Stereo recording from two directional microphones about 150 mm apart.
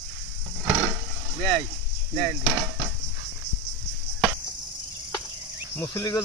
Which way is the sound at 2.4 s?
Centre (ahead or behind).